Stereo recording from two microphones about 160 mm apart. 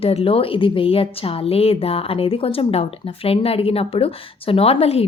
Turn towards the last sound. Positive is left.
turn(degrees=40)  # may be behind; listen again after turning